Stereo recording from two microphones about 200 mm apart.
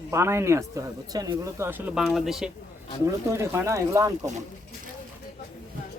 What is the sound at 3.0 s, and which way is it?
Speech, 15° right (ahead or behind).